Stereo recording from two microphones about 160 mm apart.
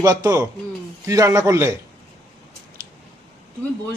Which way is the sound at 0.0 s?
25° right (ahead or behind).